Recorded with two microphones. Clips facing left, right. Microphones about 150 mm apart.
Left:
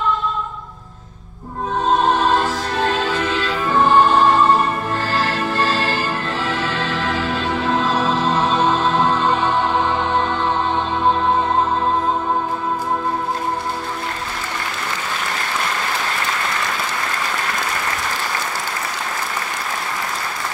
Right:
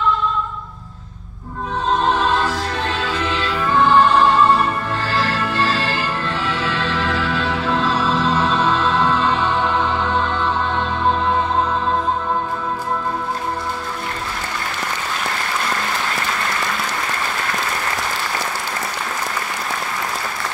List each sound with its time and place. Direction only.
2.1 s music: 40° left (ahead or behind)